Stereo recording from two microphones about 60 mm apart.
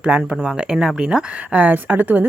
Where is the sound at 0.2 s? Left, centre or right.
Centre.